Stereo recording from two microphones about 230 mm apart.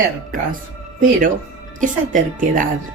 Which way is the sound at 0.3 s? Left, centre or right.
Right.